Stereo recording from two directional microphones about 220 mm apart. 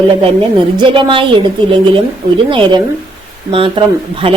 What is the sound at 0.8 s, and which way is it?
Speech, 20° right (ahead or behind).